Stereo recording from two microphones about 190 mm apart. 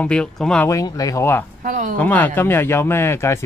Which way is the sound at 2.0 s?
10° left (ahead or behind).